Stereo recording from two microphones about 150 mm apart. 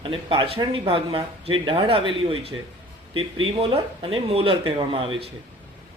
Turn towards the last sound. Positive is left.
turn(degrees=-35)  # may be behind; listen again after turning